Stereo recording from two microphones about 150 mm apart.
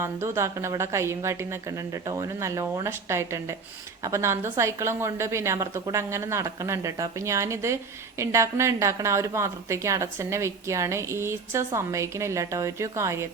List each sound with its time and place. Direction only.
0.0 s speech: 20° right (ahead or behind)